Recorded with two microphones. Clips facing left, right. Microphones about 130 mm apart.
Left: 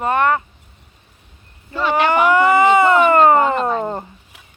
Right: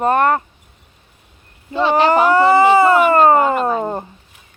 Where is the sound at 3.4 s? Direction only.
5° right (ahead or behind).